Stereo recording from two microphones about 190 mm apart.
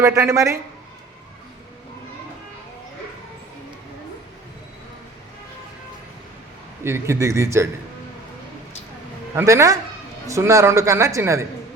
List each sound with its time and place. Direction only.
0.0 s a man's voice: 15° right (ahead or behind)
6.8 s a man's voice: 15° right (ahead or behind)
9.3 s a man's voice: 15° right (ahead or behind)